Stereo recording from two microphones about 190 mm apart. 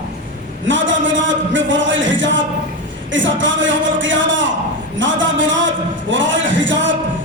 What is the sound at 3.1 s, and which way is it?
A man's voice, 75° right (ahead or behind).